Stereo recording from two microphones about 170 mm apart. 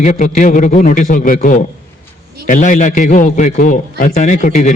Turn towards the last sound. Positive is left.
turn(degrees=45)  # may be behind; listen again after turning